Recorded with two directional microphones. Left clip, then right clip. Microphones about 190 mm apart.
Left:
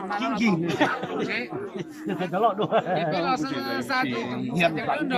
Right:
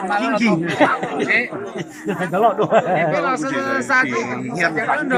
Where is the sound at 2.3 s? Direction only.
10° right (ahead or behind).